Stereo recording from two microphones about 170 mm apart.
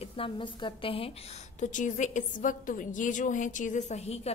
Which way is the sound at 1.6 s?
45° left (ahead or behind).